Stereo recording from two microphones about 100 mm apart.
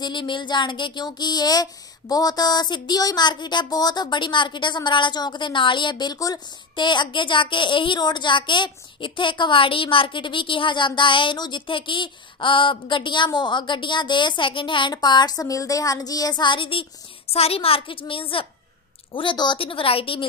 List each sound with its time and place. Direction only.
0.0 s a woman's voice: 50° left (ahead or behind)
6.1 s speech: 35° left (ahead or behind)
6.7 s a woman's voice: 50° left (ahead or behind)
17.3 s a woman's voice: 80° left; by 18.5 s 65° left (ahead or behind)
19.1 s speech: 50° left (ahead or behind)